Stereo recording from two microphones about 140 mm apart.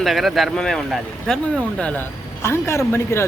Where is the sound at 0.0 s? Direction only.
Centre (ahead or behind).